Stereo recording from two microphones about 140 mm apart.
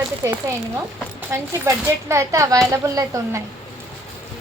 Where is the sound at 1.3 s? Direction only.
20° right (ahead or behind).